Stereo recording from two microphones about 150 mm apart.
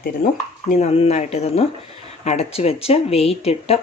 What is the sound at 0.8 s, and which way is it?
Speech, 45° left (ahead or behind).